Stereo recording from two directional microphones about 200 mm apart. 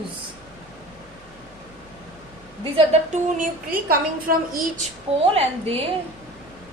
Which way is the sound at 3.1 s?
45° right (ahead or behind).